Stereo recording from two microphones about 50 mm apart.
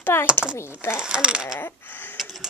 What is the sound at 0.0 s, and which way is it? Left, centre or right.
Speech, left.